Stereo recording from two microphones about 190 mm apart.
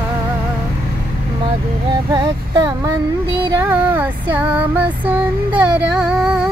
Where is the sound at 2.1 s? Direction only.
20° right (ahead or behind).